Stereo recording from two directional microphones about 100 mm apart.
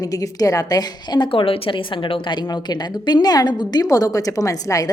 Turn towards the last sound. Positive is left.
turn(degrees=35)  # may be behind; listen again after turning